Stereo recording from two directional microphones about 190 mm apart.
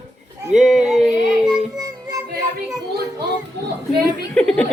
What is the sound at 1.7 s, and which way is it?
Music, 20° right (ahead or behind).